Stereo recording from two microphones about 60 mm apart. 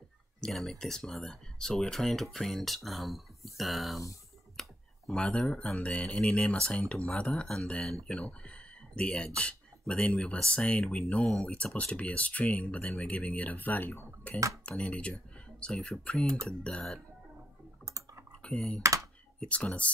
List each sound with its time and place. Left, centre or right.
0.4 s speech: centre; by 13.9 s left
14.6 s speech: centre
17.8 s computer keyboard: right
19.5 s speech: left